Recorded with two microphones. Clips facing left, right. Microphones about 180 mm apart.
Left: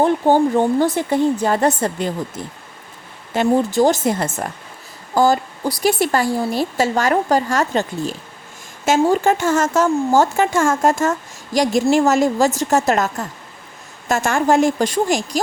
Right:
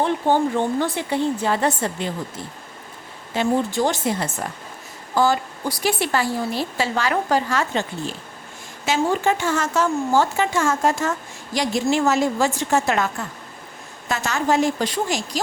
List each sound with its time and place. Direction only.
0.0 s speech: 40° left (ahead or behind)
3.3 s speech: 40° left (ahead or behind)